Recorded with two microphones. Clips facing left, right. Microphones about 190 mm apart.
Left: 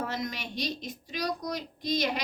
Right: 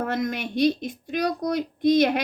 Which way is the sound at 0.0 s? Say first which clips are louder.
Right 8 dB; 55° right (ahead or behind).